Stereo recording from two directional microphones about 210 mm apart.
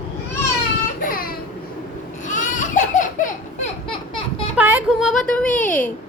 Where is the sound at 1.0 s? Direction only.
45° left (ahead or behind).